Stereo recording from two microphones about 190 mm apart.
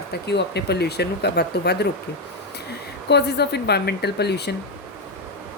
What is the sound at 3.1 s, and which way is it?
Speech, 60° left (ahead or behind).